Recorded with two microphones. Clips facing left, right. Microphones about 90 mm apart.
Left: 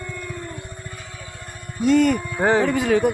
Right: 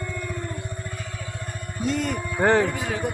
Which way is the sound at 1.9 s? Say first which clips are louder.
Left 11 dB; 70° left (ahead or behind).